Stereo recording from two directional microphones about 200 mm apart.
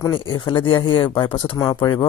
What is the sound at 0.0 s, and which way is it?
Speech, 25° left (ahead or behind).